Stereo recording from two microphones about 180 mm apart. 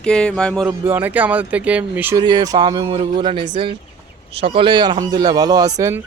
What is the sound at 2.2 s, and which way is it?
Speech, 25° right (ahead or behind).